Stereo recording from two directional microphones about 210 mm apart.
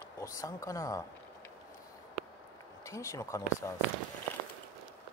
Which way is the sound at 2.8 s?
15° left (ahead or behind).